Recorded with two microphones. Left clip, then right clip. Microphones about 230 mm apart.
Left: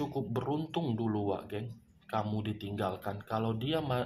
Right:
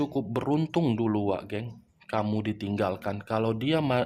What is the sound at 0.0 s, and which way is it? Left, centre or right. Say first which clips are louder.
Speech: right 6 dB; right.